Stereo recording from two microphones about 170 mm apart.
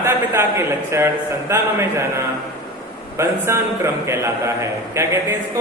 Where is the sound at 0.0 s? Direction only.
15° right (ahead or behind).